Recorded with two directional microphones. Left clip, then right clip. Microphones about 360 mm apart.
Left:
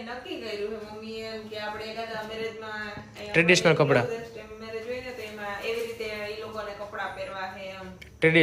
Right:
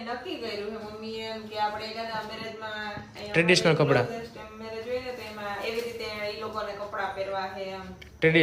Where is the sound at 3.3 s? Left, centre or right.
Centre.